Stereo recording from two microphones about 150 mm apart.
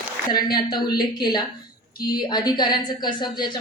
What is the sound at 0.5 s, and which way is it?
A woman's voice, 30° left (ahead or behind).